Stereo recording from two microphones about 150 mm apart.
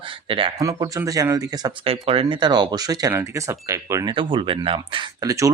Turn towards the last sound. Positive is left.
turn(degrees=-20)  # may be behind; listen again after turning